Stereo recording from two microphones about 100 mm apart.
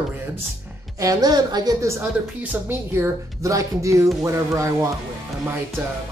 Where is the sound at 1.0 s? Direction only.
40° right (ahead or behind).